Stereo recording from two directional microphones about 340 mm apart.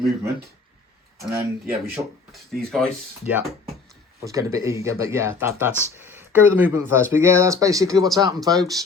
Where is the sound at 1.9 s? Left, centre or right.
Centre.